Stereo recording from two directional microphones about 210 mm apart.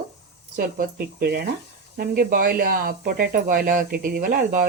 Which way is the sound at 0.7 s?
50° right (ahead or behind).